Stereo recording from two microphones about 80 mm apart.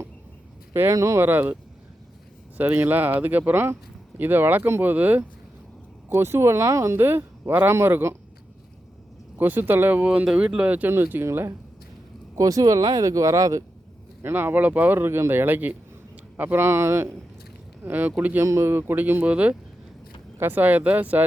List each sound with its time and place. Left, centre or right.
0.7 s speech: right
0.9 s speech: right
1.2 s speech: right
2.6 s speech: right
6.9 s speech: right
9.4 s speech: right
12.4 s speech: right
14.2 s speech: right
17.8 s speech: right
18.3 s speech: right